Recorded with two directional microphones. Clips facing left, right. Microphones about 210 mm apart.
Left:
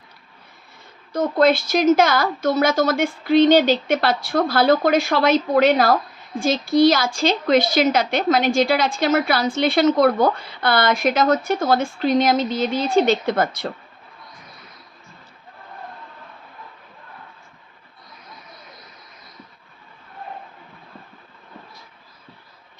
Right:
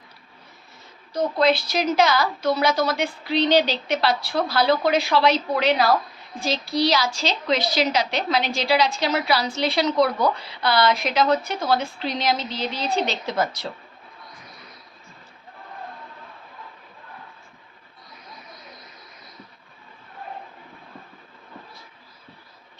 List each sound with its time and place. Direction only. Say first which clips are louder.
1.1 s a woman's voice: left 3 dB; 50° left (ahead or behind)